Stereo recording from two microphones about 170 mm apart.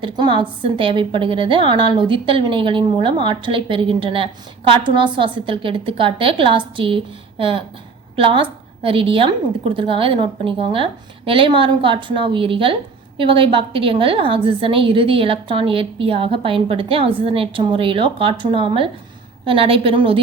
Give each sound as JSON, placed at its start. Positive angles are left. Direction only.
{"t": 0.0, "sound": "a woman's voice", "side_deg": -30}